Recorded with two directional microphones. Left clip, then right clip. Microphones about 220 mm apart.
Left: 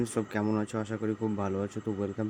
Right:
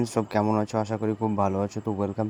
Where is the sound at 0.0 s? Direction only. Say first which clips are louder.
Right 6 dB; 20° right (ahead or behind).